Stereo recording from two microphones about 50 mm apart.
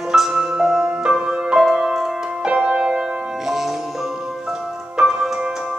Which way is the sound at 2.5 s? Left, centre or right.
Right.